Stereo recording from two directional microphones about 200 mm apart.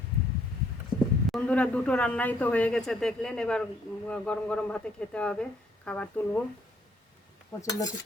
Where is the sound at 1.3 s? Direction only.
5° left (ahead or behind).